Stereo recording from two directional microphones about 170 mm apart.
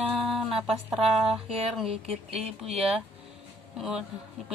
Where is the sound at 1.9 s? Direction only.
35° right (ahead or behind).